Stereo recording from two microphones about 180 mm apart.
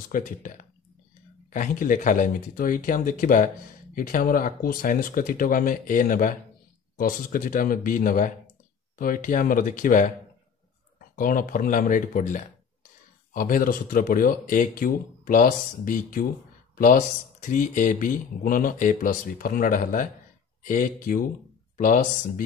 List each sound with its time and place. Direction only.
0.1 s speech: 45° left (ahead or behind)
11.1 s speech: 50° left (ahead or behind)